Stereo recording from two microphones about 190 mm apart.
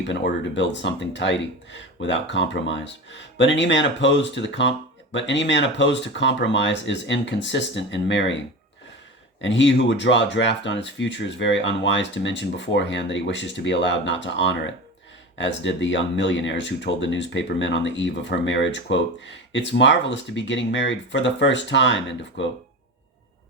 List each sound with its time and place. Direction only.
0.1 s speech: 70° left (ahead or behind)
9.4 s speech: 75° left (ahead or behind)